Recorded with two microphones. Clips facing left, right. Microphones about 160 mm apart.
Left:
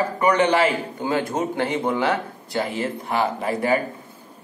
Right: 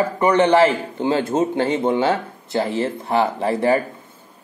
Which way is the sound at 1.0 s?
25° right (ahead or behind).